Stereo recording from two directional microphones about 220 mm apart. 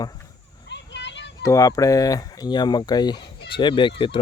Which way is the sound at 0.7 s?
55° left (ahead or behind).